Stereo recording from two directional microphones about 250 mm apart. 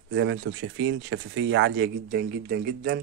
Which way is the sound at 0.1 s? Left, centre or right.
Right.